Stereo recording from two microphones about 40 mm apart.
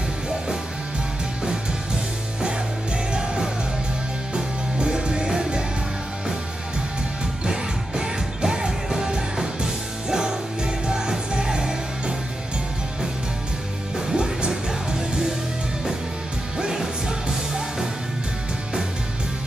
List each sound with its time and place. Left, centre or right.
3.1 s music: right
7.4 s music: centre
14.1 s music: right
16.5 s music: centre